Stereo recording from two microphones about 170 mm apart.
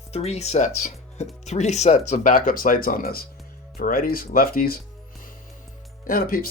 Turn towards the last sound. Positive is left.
turn(degrees=60)  # may be behind; listen again after turning